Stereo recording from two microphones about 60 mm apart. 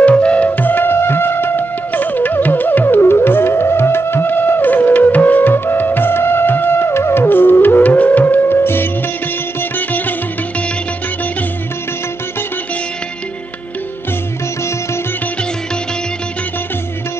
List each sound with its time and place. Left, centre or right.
0.0 s flute: centre
0.5 s music: left